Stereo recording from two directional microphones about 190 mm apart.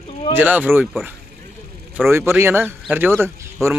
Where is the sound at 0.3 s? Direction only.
10° right (ahead or behind).